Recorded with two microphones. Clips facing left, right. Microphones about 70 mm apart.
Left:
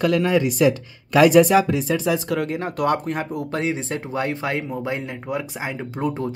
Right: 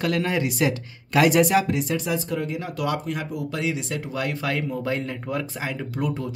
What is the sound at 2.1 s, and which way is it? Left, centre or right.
Speech, left.